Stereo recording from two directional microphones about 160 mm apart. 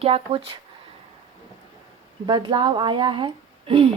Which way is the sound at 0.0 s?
35° right (ahead or behind).